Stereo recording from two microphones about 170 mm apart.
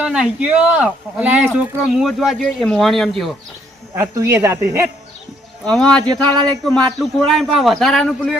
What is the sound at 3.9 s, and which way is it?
Speech, 15° right (ahead or behind).